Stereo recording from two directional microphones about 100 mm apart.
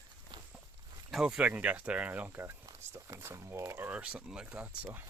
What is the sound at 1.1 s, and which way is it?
Speech, 5° right (ahead or behind).